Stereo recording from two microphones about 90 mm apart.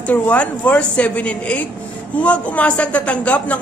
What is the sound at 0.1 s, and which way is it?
Speech, 15° left (ahead or behind).